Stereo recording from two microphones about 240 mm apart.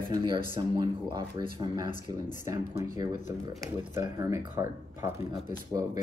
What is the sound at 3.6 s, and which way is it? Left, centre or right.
Speech, centre.